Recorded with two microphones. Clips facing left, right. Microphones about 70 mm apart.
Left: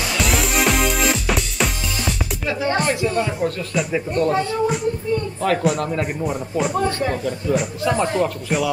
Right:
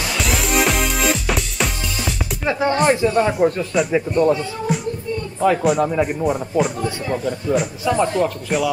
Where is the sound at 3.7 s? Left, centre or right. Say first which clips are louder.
Right 4 dB; centre.